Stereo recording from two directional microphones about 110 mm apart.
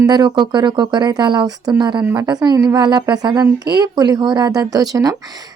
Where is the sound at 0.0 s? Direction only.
40° right (ahead or behind).